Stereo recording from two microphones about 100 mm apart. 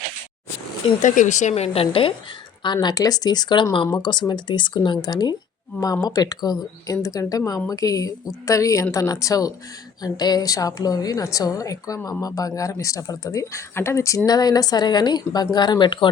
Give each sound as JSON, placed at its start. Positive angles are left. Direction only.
{"t": 1.5, "sound": "a woman's voice", "side_deg": 85}
{"t": 2.8, "sound": "a woman's voice", "side_deg": 40}
{"t": 14.3, "sound": "speech", "side_deg": 40}